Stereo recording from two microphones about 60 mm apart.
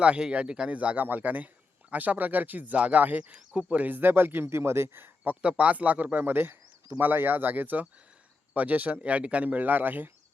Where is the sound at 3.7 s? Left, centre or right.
Right.